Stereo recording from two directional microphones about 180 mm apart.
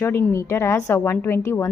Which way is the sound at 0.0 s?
10° left (ahead or behind).